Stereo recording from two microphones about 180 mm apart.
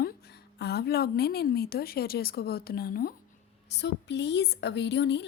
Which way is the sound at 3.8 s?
70° left (ahead or behind).